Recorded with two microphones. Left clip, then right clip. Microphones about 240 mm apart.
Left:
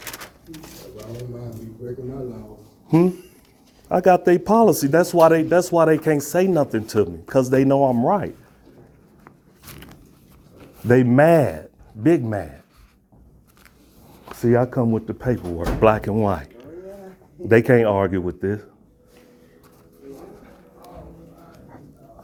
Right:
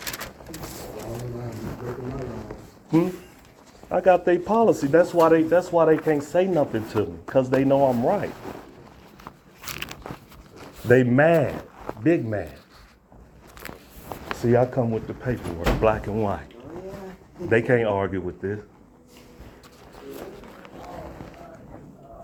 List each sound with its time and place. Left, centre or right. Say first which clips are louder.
0.0 s pigeon: right 2 dB; centre
3.8 s speech: left 3 dB; left
9.7 s biting: right 11 dB; right
10.8 s speech: left 3 dB; left
14.3 s speech: left 2 dB; left
17.5 s speech: left 5 dB; left